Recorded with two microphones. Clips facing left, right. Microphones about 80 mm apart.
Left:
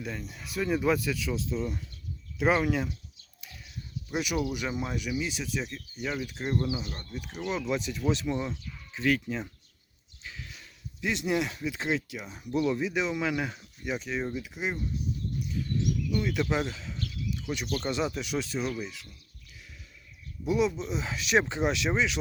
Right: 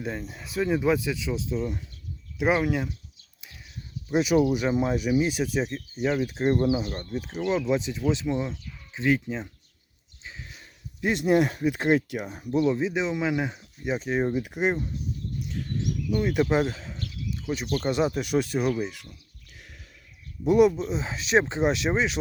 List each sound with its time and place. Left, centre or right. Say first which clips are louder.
0.0 s speech: right 4 dB; right
4.1 s speech: right 9 dB; right
7.1 s speech: right 6 dB; right
10.2 s a sound: right 1 dB; right
11.0 s speech: right 7 dB; right
12.5 s speech: right 4 dB; right
13.9 s speech: right 7 dB; right
15.4 s a sound: even; right
16.0 s speech: right 9 dB; right
19.5 s a sound: right 3 dB; right
20.5 s speech: right 8 dB; right
20.8 s speech: right 3 dB; right